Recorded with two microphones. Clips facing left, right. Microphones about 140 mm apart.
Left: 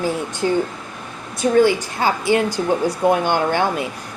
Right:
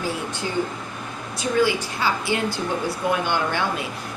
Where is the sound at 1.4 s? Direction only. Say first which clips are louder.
Left 6 dB; 50° left (ahead or behind).